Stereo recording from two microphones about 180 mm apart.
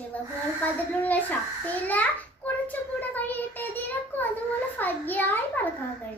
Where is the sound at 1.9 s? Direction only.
10° left (ahead or behind).